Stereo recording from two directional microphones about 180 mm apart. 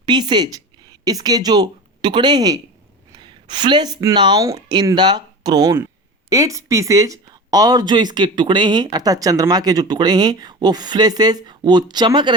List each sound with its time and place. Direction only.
0.0 s a woman's voice: 25° right (ahead or behind)